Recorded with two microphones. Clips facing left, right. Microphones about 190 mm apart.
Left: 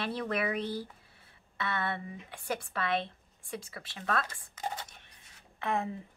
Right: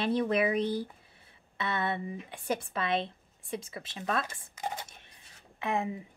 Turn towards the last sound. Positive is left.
turn(degrees=-15)  # may be behind; listen again after turning